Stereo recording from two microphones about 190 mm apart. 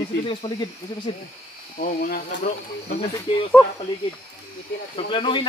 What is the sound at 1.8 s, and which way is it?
Speech, 45° left (ahead or behind).